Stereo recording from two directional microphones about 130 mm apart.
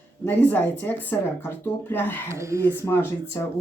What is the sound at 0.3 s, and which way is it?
Speech, 15° left (ahead or behind).